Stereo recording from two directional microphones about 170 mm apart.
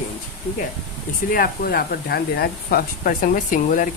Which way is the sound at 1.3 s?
55° left (ahead or behind).